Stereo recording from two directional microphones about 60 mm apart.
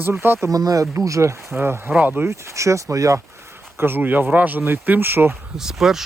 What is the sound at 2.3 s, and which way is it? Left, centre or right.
Speech, right.